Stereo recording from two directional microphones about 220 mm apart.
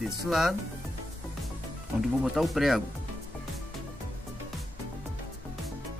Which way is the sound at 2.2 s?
Centre (ahead or behind).